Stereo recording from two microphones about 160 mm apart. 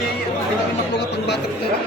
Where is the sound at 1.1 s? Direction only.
90° left.